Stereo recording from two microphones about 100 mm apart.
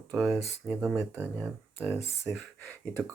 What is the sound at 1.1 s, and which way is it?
Speech, 20° right (ahead or behind).